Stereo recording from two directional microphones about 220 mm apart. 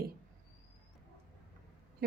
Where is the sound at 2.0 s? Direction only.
45° right (ahead or behind).